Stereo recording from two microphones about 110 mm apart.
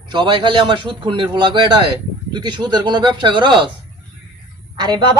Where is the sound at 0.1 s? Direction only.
45° right (ahead or behind).